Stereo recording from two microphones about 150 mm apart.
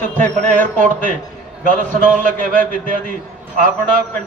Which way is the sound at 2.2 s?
60° right (ahead or behind).